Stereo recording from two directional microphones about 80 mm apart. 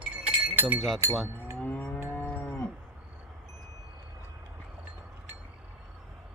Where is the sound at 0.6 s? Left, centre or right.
Right.